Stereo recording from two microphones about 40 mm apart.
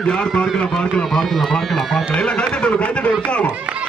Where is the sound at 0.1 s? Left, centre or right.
Left.